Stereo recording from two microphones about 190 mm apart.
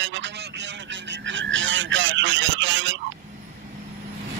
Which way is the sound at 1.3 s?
80° right.